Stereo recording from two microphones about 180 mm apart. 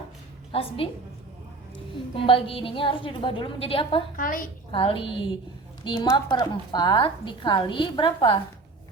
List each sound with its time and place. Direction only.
0.5 s a woman's voice: 30° left (ahead or behind)
2.2 s a woman's voice: 30° left (ahead or behind)
4.2 s a woman's voice: 50° left (ahead or behind)
4.7 s a woman's voice: 30° left (ahead or behind)